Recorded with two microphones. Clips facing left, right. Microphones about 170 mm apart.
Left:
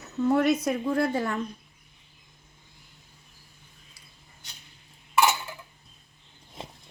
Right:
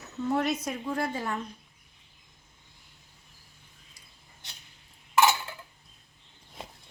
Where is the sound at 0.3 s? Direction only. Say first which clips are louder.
Left 5 dB; 70° left (ahead or behind).